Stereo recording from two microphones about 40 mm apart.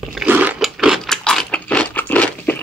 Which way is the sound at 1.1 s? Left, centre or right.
Centre.